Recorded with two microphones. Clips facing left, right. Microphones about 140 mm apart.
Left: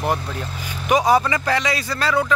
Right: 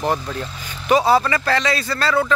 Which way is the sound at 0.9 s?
15° left (ahead or behind).